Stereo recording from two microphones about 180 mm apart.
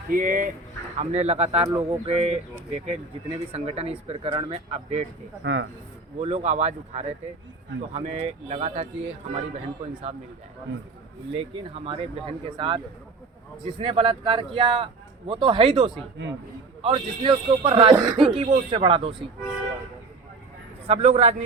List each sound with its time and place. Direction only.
0.1 s speech: 50° right (ahead or behind)
0.9 s speech: 35° right (ahead or behind)
5.4 s speech: 90° right
6.1 s speech: 35° right (ahead or behind)
11.3 s speech: 30° right (ahead or behind)
17.9 s speech: 20° right (ahead or behind)
20.8 s speech: 35° right (ahead or behind)